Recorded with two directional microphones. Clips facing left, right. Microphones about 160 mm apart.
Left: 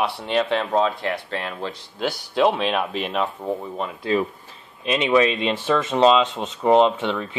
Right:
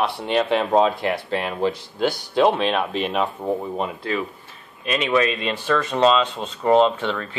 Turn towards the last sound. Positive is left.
turn(degrees=15)  # may be behind; listen again after turning